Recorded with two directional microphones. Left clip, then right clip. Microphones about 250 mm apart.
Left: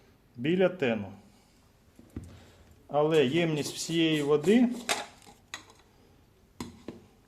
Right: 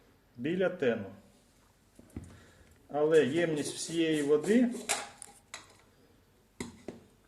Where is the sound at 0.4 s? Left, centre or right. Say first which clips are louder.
Left 3 dB; left.